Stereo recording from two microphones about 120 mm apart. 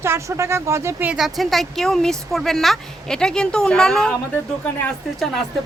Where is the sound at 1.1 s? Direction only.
Centre (ahead or behind).